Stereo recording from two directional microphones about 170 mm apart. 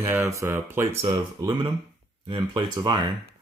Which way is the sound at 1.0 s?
25° right (ahead or behind).